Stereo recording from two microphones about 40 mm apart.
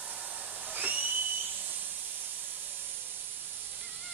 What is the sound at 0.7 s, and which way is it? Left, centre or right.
Whistle, right.